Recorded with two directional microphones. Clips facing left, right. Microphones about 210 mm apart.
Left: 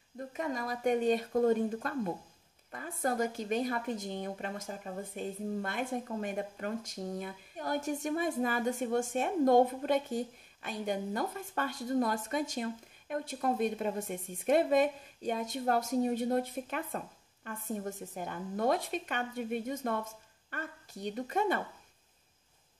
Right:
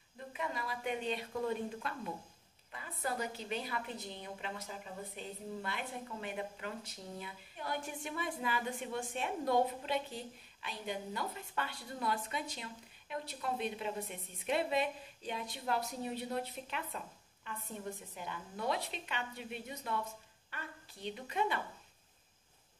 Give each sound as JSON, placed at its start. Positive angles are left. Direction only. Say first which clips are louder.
{"t": 0.3, "sound": "a woman's voice", "louder": "left 5 dB", "side_deg": 45}